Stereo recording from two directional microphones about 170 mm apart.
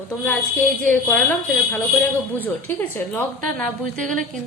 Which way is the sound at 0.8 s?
10° left (ahead or behind).